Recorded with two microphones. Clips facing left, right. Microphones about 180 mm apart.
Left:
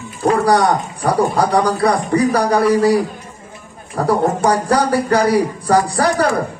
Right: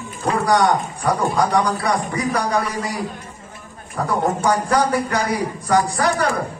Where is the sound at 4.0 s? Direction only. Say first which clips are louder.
Left 5 dB; 35° left (ahead or behind).